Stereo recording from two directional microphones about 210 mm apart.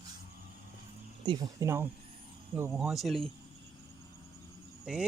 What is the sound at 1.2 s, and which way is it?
Speech, 20° right (ahead or behind).